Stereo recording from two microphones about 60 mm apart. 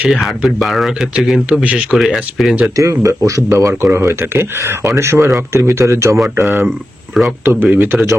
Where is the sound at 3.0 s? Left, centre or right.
Right.